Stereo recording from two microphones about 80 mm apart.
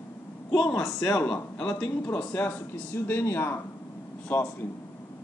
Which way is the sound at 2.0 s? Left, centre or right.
Left.